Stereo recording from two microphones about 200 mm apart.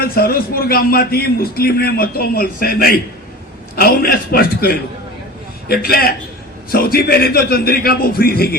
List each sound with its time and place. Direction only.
0.0 s a man's voice: 50° left (ahead or behind)